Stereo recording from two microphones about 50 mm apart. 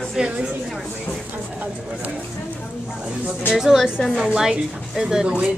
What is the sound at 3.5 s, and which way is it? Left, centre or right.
Speech, centre.